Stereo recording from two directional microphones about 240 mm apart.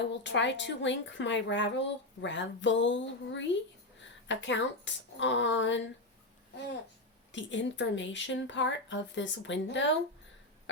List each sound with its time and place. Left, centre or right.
0.0 s speech: left
7.3 s speech: left